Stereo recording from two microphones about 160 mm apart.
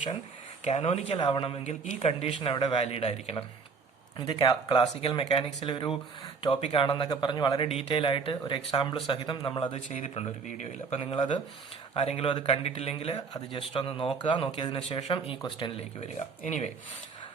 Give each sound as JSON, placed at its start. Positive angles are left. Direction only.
{"t": 0.6, "sound": "speech", "side_deg": 45}
{"t": 7.7, "sound": "speech", "side_deg": 40}
{"t": 9.9, "sound": "speech", "side_deg": 45}